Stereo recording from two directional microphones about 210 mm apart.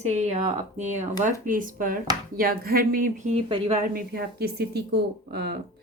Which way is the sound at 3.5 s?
25° right (ahead or behind).